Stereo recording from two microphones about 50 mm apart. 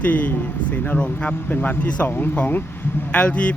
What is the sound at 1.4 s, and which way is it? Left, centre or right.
Speech, left.